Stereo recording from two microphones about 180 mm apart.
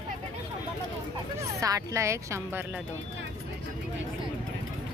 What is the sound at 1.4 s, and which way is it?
Speech, 20° right (ahead or behind).